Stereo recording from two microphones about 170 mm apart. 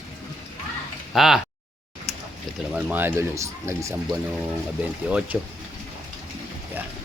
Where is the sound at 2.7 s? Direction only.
10° right (ahead or behind).